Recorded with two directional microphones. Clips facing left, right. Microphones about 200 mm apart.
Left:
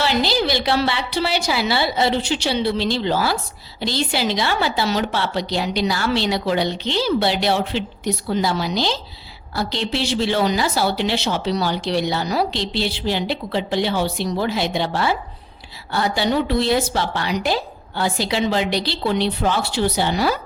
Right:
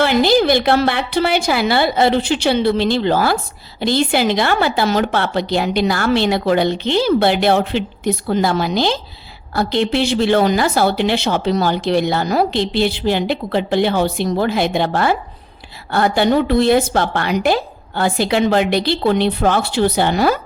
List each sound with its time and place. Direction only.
0.0 s a woman's voice: 50° right (ahead or behind)